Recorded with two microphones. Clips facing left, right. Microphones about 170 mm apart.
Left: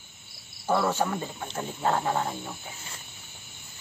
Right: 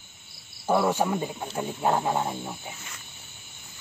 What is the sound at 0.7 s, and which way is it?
Speech, 15° right (ahead or behind).